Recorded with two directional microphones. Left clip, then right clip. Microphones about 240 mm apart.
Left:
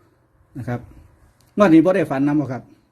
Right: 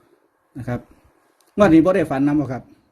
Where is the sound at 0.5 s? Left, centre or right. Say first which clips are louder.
Even; centre.